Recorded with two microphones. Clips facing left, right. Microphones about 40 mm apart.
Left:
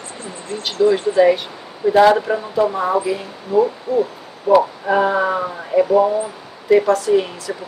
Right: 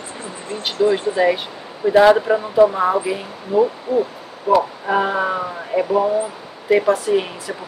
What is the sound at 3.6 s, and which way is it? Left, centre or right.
Speech, centre.